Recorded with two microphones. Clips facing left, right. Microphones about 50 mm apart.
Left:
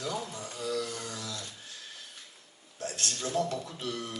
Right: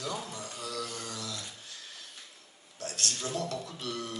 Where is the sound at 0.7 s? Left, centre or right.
Left.